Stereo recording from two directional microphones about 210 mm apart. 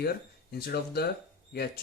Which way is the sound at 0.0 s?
50° left (ahead or behind).